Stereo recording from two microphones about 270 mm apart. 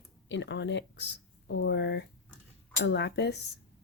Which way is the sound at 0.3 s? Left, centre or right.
Left.